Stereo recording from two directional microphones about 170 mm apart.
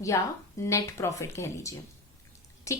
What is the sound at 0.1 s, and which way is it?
A woman's voice, 20° left (ahead or behind).